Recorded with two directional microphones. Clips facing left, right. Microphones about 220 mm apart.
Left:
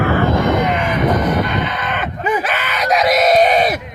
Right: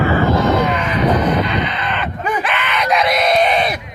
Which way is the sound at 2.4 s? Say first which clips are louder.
Even; 40° left (ahead or behind).